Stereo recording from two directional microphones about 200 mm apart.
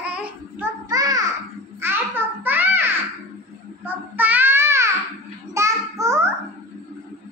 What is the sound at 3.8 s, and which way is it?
Child singing, 10° right (ahead or behind).